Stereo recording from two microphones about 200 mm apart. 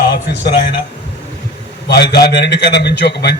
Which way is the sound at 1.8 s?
55° left (ahead or behind).